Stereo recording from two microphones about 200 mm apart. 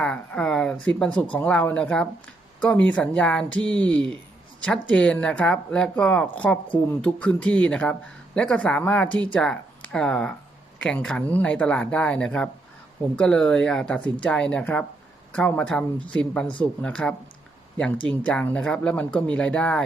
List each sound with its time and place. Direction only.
0.0 s speech: 5° left (ahead or behind)
3.6 s speech: 20° right (ahead or behind)
4.6 s speech: 5° left (ahead or behind)